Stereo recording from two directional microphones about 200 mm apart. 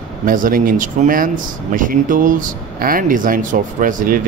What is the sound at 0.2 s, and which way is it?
Speech, 45° right (ahead or behind).